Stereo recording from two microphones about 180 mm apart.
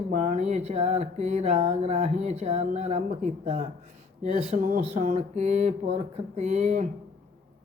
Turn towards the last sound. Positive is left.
turn(degrees=-40)  # may be behind; listen again after turning